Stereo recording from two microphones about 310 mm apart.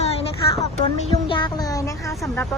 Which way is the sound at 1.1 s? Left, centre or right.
Centre.